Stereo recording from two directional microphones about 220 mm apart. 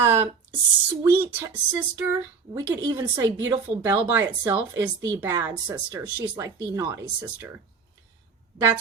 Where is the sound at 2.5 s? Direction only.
15° right (ahead or behind).